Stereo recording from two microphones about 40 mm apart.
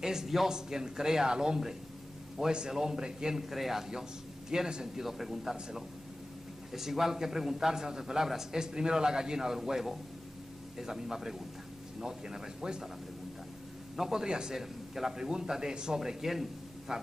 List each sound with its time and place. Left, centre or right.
0.0 s a man's voice: centre
4.5 s a man's voice: centre
5.0 s a man's voice: centre
13.9 s a man's voice: centre